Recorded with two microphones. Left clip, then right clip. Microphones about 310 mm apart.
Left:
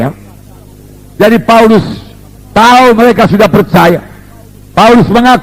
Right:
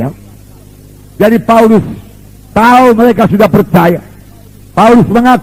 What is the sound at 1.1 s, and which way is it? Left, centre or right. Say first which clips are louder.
A man's voice: left 2 dB; left.